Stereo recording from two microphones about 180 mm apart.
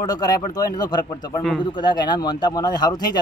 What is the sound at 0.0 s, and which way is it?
Speech, 20° left (ahead or behind).